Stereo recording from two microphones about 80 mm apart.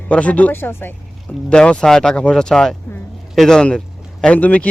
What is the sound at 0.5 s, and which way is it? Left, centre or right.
Speech, left.